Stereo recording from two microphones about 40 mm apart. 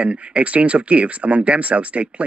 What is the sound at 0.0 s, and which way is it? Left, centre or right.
Speech, right.